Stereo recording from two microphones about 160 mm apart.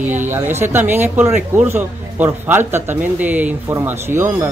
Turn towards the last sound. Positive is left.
turn(degrees=-15)  # may be behind; listen again after turning